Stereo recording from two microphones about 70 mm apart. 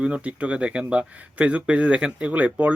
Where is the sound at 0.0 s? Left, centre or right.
Centre.